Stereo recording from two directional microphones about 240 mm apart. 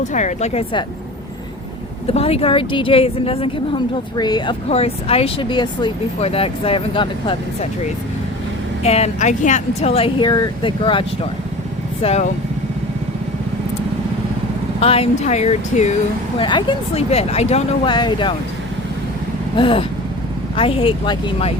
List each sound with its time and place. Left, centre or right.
0.0 s speech: left
2.1 s speech: left
8.8 s speech: left
14.8 s speech: left
19.5 s speech: left